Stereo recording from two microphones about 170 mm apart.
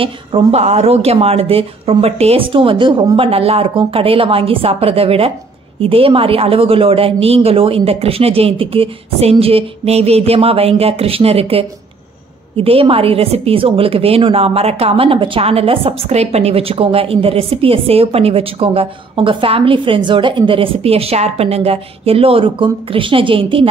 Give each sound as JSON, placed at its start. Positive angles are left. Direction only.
{"t": 0.0, "sound": "a woman's voice", "side_deg": -30}